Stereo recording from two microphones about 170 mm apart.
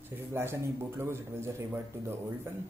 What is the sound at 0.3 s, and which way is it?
Speech, 15° right (ahead or behind).